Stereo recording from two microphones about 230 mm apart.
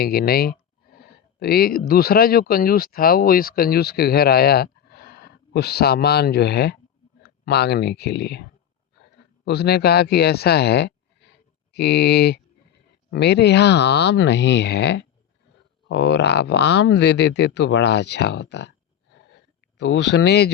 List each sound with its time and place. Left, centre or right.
0.0 s a sound: left
1.9 s speech: left
19.8 s speech: left